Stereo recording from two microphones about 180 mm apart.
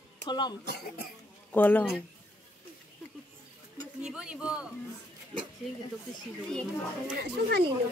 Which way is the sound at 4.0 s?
5° right (ahead or behind).